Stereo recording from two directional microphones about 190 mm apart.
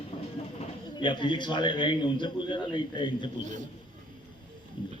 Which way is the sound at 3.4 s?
40° right (ahead or behind).